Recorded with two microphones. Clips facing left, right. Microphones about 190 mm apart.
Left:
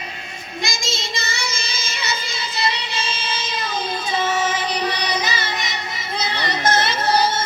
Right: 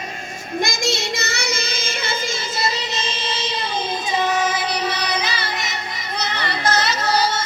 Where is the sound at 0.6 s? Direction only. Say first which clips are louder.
Right 5 dB; 60° right (ahead or behind).